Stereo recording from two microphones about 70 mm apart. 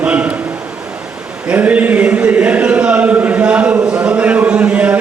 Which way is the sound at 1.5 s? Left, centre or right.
Right.